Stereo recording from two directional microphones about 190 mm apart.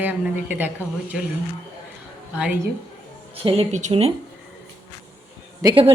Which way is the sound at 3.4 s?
30° right (ahead or behind).